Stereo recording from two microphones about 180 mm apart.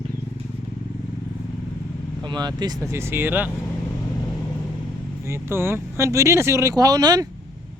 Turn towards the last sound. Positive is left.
turn(degrees=-20)  # may be behind; listen again after turning